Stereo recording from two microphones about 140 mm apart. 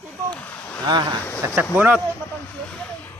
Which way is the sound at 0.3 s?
10° left (ahead or behind).